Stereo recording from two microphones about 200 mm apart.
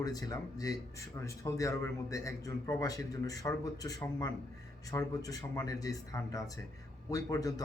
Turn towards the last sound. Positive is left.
turn(degrees=15)  # may be behind; listen again after turning